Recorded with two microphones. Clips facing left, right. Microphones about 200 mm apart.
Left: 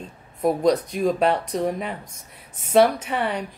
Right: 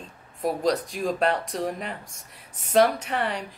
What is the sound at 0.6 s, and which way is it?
Speech, centre (ahead or behind).